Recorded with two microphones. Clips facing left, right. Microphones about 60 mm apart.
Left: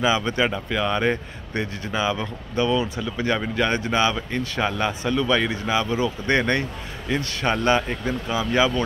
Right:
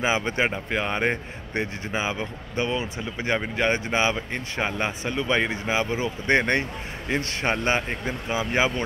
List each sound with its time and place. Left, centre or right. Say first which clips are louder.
0.0 s a man's voice: left 2 dB; right